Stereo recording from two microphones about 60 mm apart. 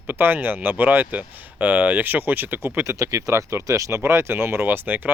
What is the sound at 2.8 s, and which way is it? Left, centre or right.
Speech, right.